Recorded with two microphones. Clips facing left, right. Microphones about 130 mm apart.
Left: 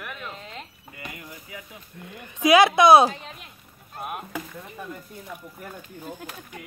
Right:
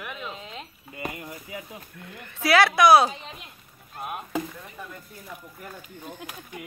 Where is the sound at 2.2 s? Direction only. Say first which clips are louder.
Left 4 dB; 15° left (ahead or behind).